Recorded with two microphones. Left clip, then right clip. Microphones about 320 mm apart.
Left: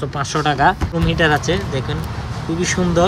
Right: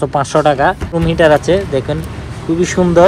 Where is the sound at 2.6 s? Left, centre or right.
Centre.